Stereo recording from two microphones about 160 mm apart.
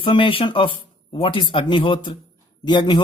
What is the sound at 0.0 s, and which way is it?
A man's voice, 35° left (ahead or behind).